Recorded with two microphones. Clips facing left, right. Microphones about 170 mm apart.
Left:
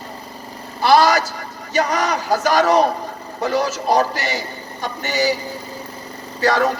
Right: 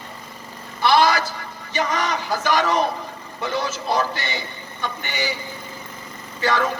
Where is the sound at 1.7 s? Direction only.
40° left (ahead or behind).